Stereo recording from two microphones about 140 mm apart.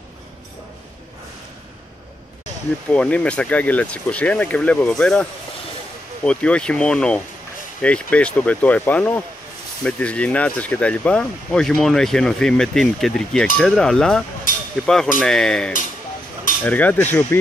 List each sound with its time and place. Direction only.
2.9 s speech: 10° left (ahead or behind)